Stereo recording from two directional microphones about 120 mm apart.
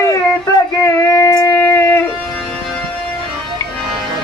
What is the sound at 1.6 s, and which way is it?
Music, 20° left (ahead or behind).